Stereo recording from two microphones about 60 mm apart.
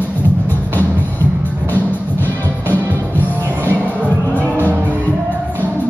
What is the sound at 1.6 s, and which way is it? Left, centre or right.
Music, left.